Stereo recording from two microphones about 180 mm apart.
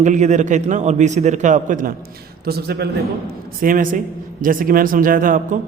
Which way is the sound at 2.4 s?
60° right (ahead or behind).